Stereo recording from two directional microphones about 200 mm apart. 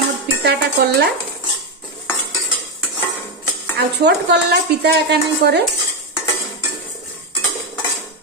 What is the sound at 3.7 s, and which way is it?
Speech, 55° right (ahead or behind).